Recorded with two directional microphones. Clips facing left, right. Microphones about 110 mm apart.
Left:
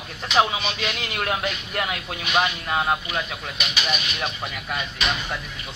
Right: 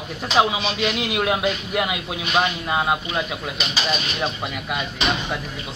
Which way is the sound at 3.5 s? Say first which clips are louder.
Right 2 dB; 30° right (ahead or behind).